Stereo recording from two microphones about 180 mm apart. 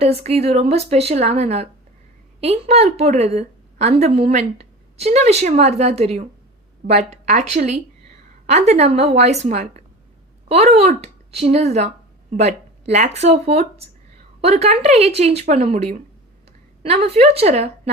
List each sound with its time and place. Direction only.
0.0 s a woman's voice: 35° right (ahead or behind)
16.8 s a woman's voice: 35° right (ahead or behind)